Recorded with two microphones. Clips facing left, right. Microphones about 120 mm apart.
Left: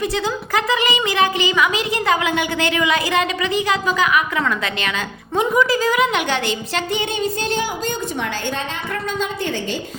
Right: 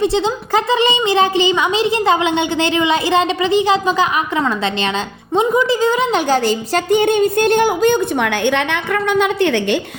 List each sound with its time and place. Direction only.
0.0 s a woman's voice: 25° right (ahead or behind); by 9.7 s 70° right (ahead or behind)